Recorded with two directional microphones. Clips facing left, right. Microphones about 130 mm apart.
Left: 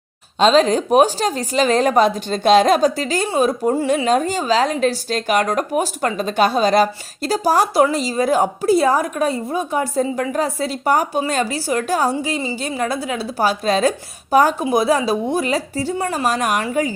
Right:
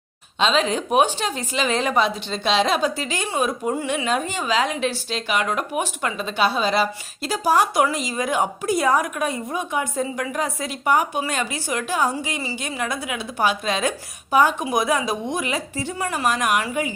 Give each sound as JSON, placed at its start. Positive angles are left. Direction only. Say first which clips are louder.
{"t": 0.3, "sound": "a woman's voice", "louder": "left 7 dB", "side_deg": 40}
{"t": 12.1, "sound": "a woman's voice", "louder": "left 6 dB", "side_deg": 25}